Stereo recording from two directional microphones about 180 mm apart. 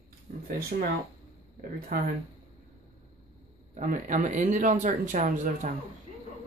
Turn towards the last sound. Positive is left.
turn(degrees=-45)  # may be behind; listen again after turning